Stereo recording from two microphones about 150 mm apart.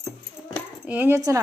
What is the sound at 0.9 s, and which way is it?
Speech, 15° right (ahead or behind).